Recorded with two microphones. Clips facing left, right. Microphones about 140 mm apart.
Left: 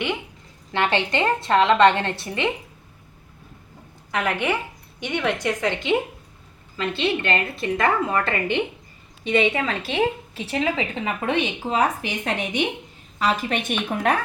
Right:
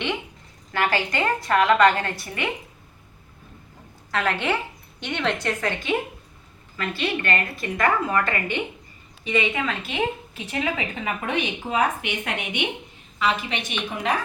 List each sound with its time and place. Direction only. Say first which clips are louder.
0.7 s a woman's voice: left 2 dB; 25° left (ahead or behind)
4.1 s a woman's voice: left 1 dB; 15° left (ahead or behind)
9.6 s a woman's voice: left 3 dB; 35° left (ahead or behind); by 14.1 s 50° left (ahead or behind)